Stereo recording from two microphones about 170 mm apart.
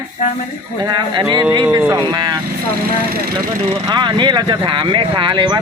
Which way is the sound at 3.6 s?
25° right (ahead or behind).